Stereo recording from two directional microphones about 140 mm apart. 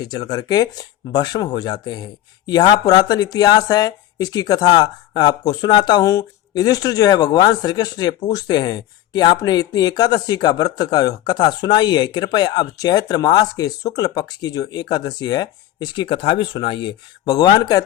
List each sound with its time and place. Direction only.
0.0 s speech: 30° left (ahead or behind)